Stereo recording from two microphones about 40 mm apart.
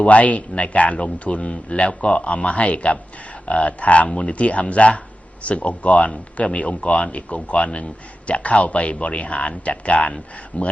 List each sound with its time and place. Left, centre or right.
0.0 s speech: left